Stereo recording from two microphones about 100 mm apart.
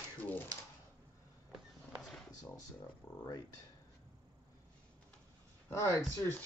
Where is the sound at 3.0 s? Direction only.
35° left (ahead or behind).